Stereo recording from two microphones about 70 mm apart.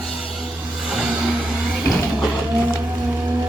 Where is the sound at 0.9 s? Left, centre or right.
Centre.